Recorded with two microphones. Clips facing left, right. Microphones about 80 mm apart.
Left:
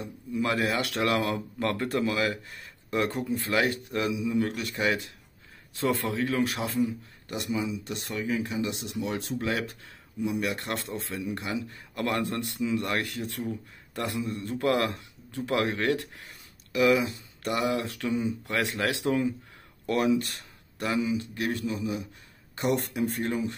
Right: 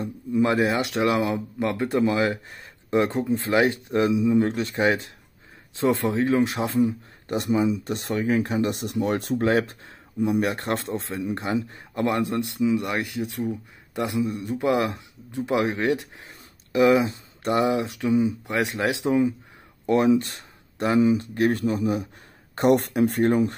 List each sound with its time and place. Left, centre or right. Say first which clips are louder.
0.3 s a man's voice: right 6 dB; right
7.2 s a man's voice: right 8 dB; right